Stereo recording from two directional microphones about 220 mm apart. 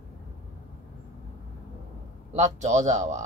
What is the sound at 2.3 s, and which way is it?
Speech, 30° right (ahead or behind).